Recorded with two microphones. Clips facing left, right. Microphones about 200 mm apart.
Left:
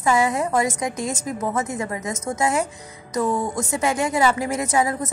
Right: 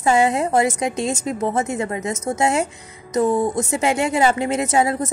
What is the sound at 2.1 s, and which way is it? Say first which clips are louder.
Speech: right 3 dB; 10° right (ahead or behind).